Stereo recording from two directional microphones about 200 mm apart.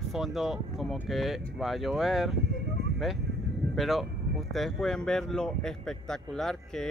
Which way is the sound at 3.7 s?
Centre (ahead or behind).